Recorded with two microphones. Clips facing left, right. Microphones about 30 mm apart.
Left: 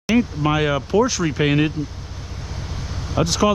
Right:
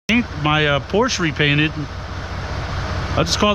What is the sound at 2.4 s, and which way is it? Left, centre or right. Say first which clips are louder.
Vehicle: right 6 dB; right.